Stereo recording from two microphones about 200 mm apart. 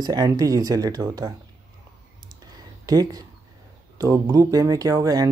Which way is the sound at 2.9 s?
20° right (ahead or behind).